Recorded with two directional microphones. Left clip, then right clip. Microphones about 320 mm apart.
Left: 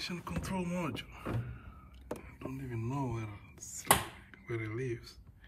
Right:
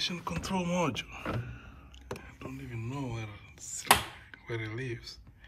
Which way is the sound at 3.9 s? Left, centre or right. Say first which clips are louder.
Right 4 dB; centre.